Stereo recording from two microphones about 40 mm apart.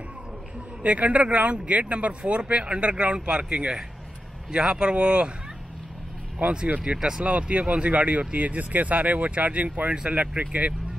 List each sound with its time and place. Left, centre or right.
0.8 s speech: right
6.3 s speech: right
7.0 s speech: centre
7.2 s speech: right